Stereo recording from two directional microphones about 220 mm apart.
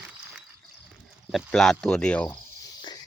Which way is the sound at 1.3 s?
Centre (ahead or behind).